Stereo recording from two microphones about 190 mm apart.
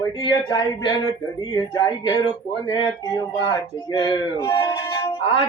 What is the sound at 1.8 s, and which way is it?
Female singing, 25° left (ahead or behind).